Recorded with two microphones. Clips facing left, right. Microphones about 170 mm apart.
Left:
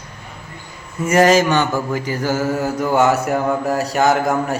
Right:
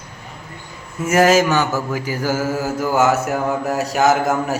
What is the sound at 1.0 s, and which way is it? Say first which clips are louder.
A man's voice: left 1 dB; 5° right (ahead or behind).